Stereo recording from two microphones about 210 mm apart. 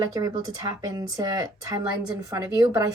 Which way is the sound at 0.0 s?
15° right (ahead or behind).